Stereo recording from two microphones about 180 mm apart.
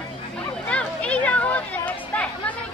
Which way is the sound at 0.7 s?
5° left (ahead or behind).